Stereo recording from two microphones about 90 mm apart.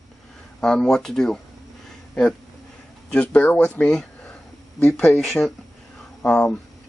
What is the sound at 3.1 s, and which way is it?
Speech, 15° left (ahead or behind).